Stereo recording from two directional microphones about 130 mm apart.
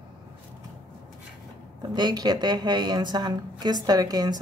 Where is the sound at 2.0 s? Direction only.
35° right (ahead or behind).